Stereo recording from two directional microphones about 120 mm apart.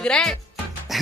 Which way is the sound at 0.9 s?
Centre (ahead or behind).